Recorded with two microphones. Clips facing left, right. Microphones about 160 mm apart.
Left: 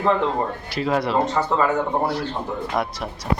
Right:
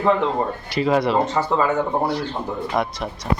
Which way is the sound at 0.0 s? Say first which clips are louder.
Right 1 dB; centre (ahead or behind).